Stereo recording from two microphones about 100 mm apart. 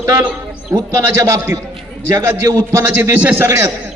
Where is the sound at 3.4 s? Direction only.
30° right (ahead or behind).